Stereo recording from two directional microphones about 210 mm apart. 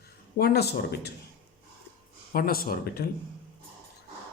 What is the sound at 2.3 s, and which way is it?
Speech, 45° left (ahead or behind).